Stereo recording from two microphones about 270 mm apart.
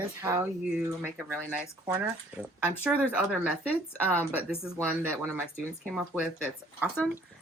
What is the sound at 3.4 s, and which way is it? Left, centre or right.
Speech, centre.